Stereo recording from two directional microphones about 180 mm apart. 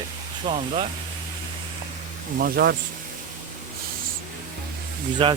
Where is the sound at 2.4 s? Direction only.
60° right (ahead or behind).